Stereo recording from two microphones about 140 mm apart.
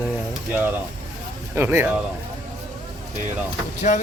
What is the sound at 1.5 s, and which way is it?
Speech, 15° right (ahead or behind).